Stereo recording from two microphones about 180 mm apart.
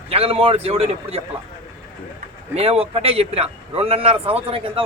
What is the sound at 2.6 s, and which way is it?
A man's voice, 35° right (ahead or behind).